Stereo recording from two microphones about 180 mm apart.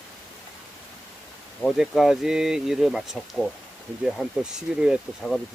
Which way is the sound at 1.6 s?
Centre (ahead or behind).